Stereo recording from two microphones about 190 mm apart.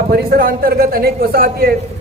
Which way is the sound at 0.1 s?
55° right (ahead or behind).